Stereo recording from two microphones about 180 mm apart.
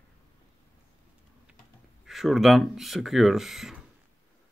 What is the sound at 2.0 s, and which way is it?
Speech, centre (ahead or behind).